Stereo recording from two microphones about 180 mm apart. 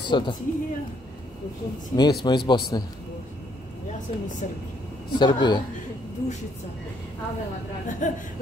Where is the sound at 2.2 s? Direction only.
25° left (ahead or behind).